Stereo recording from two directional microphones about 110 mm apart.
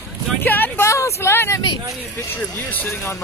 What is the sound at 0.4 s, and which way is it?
Vehicle, 15° left (ahead or behind).